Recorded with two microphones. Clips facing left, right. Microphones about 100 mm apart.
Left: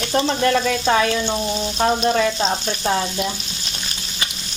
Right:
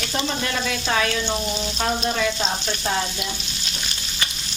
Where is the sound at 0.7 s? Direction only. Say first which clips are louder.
Left 5 dB; 30° left (ahead or behind).